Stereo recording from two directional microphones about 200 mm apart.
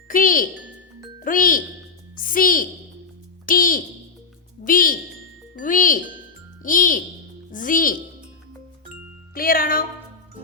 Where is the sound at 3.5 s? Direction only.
45° left (ahead or behind).